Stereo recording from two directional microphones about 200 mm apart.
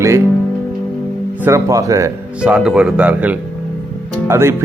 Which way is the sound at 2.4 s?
5° right (ahead or behind).